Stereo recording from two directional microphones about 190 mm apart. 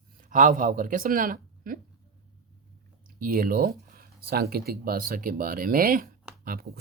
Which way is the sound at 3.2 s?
50° right (ahead or behind).